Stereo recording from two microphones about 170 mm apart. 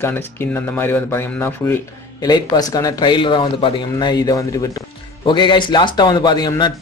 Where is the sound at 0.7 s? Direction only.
15° left (ahead or behind).